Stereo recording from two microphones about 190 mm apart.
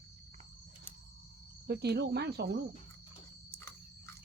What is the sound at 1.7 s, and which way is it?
Speech, 60° right (ahead or behind).